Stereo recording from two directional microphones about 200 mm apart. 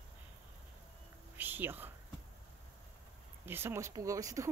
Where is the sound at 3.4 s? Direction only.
10° right (ahead or behind).